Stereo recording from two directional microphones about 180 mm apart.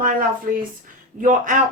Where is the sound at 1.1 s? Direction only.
45° right (ahead or behind).